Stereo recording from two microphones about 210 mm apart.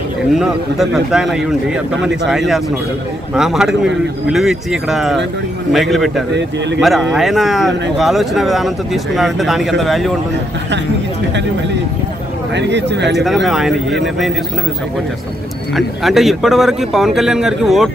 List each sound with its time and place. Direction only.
0.3 s speech: centre (ahead or behind)
12.5 s speech: 55° right (ahead or behind)
13.2 s speech: centre (ahead or behind)
15.7 s speech: centre (ahead or behind)